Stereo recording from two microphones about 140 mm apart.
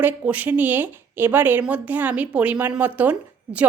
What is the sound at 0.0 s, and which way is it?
Speech, 10° right (ahead or behind).